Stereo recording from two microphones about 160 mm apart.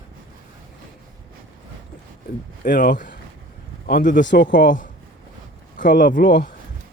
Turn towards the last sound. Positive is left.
turn(degrees=65)  # may be behind; listen again after turning